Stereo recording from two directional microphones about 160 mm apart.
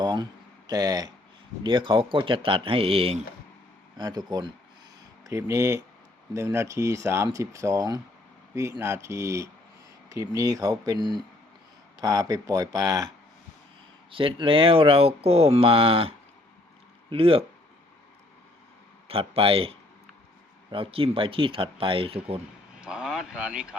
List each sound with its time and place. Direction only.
0.0 s speech: 25° right (ahead or behind)
14.1 s speech: 35° right (ahead or behind)
19.0 s speech: 35° right (ahead or behind)
22.8 s a sound: 5° right (ahead or behind)